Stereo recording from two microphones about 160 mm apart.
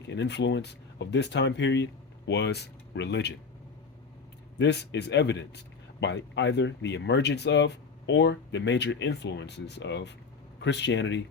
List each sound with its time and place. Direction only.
0.1 s speech: 90° left
4.5 s a man's voice: 90° left